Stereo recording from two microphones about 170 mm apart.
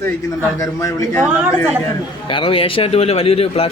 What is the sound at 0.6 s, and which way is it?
Speech, 20° left (ahead or behind).